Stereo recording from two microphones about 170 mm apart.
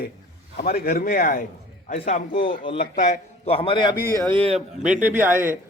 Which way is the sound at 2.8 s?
45° left (ahead or behind).